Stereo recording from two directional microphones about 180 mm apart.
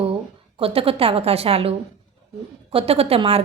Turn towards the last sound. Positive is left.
turn(degrees=-30)  # may be behind; listen again after turning